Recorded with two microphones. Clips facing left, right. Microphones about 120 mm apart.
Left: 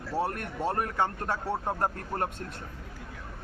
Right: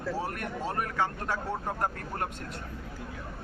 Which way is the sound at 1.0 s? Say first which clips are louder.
Left 1 dB; 20° left (ahead or behind).